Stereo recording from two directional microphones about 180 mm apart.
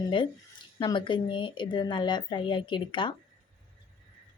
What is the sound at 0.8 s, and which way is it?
A woman's voice, 25° left (ahead or behind).